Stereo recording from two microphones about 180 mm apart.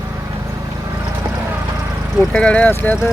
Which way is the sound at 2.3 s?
5° left (ahead or behind).